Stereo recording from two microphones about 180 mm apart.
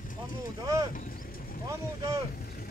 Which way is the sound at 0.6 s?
20° right (ahead or behind).